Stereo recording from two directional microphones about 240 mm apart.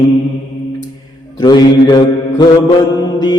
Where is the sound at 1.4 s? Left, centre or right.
Centre.